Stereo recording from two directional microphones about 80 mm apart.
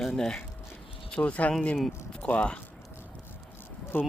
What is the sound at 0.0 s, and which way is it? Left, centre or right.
Speech, centre.